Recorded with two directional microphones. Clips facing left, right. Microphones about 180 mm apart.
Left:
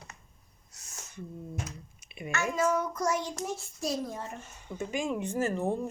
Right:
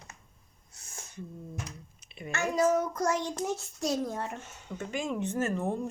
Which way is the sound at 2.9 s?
60° right (ahead or behind).